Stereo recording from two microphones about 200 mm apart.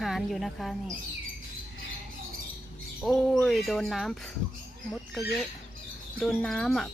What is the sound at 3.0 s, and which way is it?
Speech, centre (ahead or behind).